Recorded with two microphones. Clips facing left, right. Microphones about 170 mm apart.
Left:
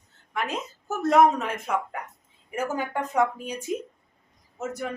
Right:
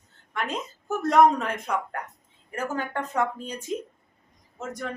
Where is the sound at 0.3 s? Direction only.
Centre (ahead or behind).